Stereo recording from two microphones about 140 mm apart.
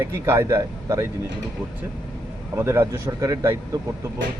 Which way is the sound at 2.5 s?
15° right (ahead or behind).